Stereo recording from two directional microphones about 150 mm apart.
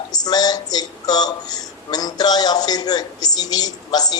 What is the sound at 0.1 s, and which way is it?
A man's voice, 25° left (ahead or behind).